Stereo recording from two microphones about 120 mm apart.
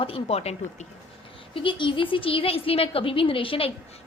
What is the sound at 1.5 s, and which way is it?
A woman's voice, 45° left (ahead or behind).